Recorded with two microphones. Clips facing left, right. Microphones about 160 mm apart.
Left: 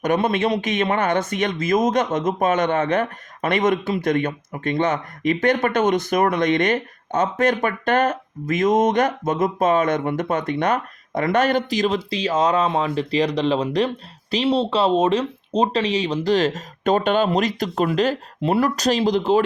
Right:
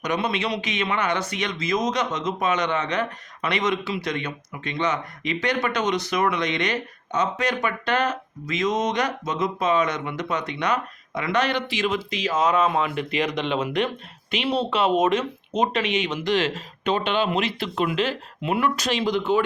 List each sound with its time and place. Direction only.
0.0 s a man's voice: 50° left (ahead or behind)